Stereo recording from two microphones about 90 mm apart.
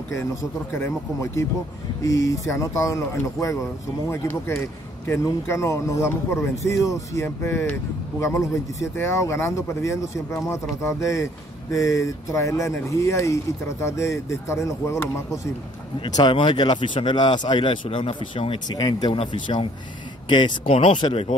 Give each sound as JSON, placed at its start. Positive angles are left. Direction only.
{"t": 0.7, "sound": "speech", "side_deg": 30}
{"t": 16.3, "sound": "a man's voice", "side_deg": 65}
{"t": 18.7, "sound": "speech", "side_deg": 50}
{"t": 19.1, "sound": "speech", "side_deg": 75}
{"t": 20.2, "sound": "speech", "side_deg": 65}